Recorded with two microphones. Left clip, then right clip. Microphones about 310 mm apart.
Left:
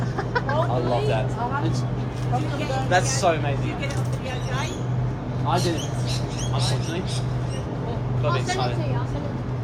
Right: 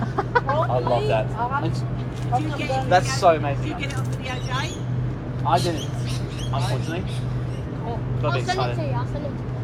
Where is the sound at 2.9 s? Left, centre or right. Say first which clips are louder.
Right 4 dB; right.